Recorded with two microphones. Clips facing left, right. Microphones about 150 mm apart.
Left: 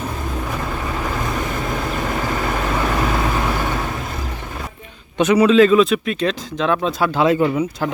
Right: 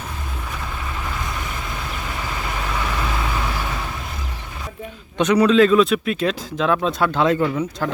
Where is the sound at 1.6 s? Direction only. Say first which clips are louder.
Left 7 dB; 50° left (ahead or behind).